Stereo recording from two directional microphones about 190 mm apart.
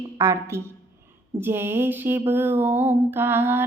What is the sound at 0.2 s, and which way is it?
Female singing, 15° right (ahead or behind).